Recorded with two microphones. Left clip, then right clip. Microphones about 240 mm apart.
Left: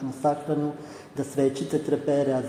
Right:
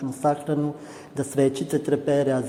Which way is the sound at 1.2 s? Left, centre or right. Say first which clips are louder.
Right 2 dB; right.